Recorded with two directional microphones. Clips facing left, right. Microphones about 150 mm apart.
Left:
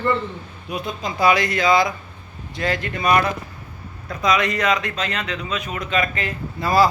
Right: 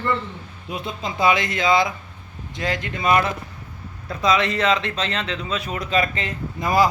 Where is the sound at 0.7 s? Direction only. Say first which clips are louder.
Left 1 dB; 25° right (ahead or behind).